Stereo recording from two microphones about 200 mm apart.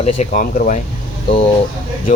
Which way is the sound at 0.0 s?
35° left (ahead or behind).